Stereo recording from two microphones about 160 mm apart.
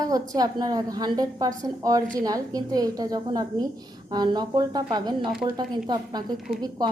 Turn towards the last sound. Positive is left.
turn(degrees=-25)  # may be behind; listen again after turning